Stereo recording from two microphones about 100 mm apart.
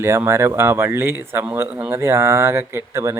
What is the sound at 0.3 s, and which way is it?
Speech, 25° right (ahead or behind).